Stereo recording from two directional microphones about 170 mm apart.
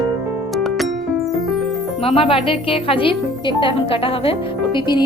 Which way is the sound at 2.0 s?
35° left (ahead or behind).